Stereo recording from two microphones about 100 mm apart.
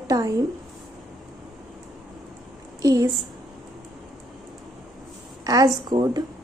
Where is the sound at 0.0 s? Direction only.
35° right (ahead or behind).